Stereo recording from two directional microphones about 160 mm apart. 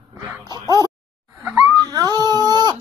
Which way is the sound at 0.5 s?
25° right (ahead or behind).